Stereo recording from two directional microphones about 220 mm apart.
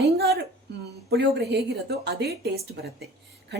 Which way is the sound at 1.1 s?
50° right (ahead or behind).